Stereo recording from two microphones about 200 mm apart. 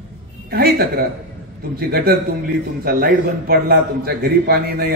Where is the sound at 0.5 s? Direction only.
50° right (ahead or behind).